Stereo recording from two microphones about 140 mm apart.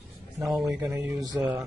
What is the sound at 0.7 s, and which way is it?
Speech, 20° right (ahead or behind).